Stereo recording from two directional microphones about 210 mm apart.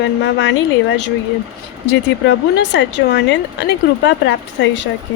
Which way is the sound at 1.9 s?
55° left (ahead or behind).